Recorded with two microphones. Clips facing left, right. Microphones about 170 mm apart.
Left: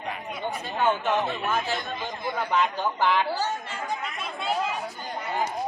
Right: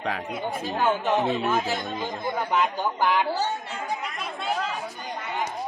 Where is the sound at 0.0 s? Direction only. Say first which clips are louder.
Right 5 dB; 90° right.